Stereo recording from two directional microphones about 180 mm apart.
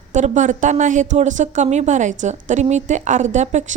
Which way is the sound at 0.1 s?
45° right (ahead or behind).